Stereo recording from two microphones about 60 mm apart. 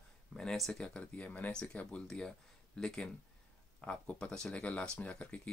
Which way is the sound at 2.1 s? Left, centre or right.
Centre.